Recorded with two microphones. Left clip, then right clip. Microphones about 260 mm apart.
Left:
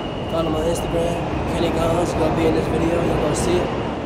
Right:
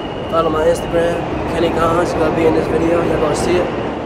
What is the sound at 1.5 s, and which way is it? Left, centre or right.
Speech, centre.